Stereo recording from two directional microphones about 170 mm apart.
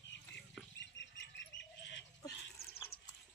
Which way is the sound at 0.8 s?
90° left.